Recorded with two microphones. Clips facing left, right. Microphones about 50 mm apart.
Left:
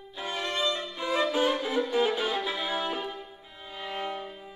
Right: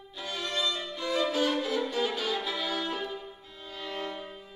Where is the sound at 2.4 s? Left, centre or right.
Left.